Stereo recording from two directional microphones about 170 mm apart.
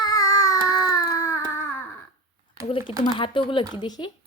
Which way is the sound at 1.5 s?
15° left (ahead or behind).